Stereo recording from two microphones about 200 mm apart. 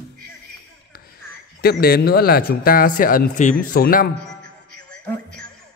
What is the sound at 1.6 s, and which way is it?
A man's voice, 50° left (ahead or behind).